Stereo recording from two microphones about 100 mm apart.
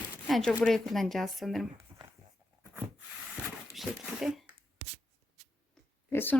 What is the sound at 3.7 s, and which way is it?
Speech, centre (ahead or behind).